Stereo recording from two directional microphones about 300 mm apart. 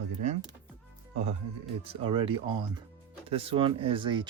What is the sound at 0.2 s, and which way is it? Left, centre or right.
Power windows, right.